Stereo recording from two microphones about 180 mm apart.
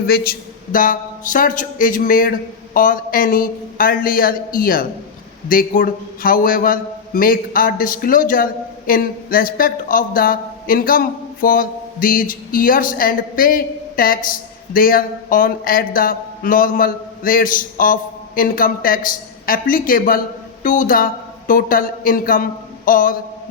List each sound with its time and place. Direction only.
0.1 s speech: 55° left (ahead or behind)